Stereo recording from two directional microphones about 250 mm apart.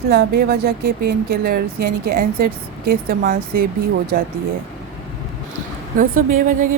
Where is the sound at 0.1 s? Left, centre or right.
Right.